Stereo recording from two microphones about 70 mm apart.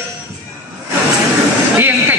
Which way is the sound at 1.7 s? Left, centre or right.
Right.